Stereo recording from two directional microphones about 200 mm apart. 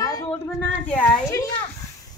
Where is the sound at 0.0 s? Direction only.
15° left (ahead or behind).